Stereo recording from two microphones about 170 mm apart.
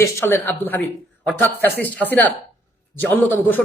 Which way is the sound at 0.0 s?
15° left (ahead or behind).